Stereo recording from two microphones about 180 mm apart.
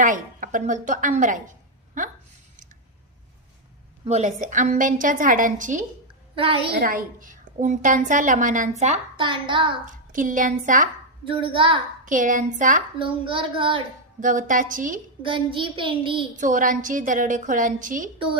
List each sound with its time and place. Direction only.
0.0 s a woman's voice: 45° right (ahead or behind)
4.0 s a woman's voice: 40° right (ahead or behind)
6.3 s a woman's voice: 30° right (ahead or behind)
6.7 s a woman's voice: 50° right (ahead or behind)
9.1 s child singing: 25° right (ahead or behind)
9.8 s a woman's voice: 45° right (ahead or behind)
11.3 s child singing: 30° right (ahead or behind)
12.0 s a woman's voice: 45° right (ahead or behind)
13.0 s child singing: 30° right (ahead or behind)
14.2 s a woman's voice: 45° right (ahead or behind)
15.2 s child singing: 30° right (ahead or behind)
16.3 s a woman's voice: 45° right (ahead or behind)